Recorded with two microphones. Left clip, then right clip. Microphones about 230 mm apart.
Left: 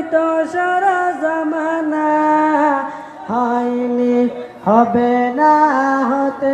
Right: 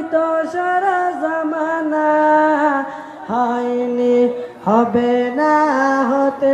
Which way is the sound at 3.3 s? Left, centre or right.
Left.